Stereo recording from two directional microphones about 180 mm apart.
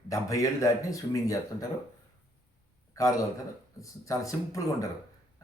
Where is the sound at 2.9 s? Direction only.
20° left (ahead or behind).